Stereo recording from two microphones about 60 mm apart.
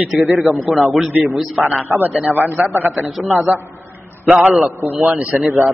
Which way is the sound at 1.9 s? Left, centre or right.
Right.